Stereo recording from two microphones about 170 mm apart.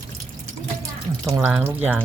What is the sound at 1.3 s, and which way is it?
Speech, 20° right (ahead or behind).